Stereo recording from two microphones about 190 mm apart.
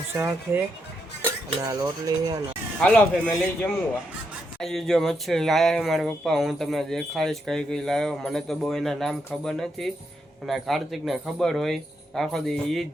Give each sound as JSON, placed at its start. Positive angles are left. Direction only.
{"t": 0.1, "sound": "speech", "side_deg": -10}
{"t": 2.8, "sound": "speech", "side_deg": 5}